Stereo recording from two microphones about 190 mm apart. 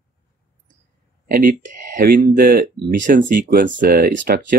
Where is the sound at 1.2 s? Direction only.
50° right (ahead or behind).